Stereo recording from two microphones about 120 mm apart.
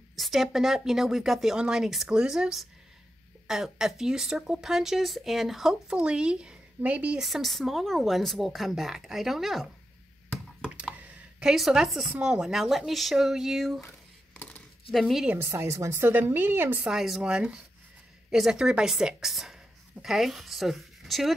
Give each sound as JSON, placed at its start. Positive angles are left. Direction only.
{"t": 0.1, "sound": "speech", "side_deg": 0}
{"t": 10.8, "sound": "a sound", "side_deg": -10}
{"t": 12.2, "sound": "speech", "side_deg": -5}
{"t": 14.9, "sound": "speech", "side_deg": 0}
{"t": 15.3, "sound": "a woman's voice", "side_deg": -20}
{"t": 16.9, "sound": "a woman's voice", "side_deg": -5}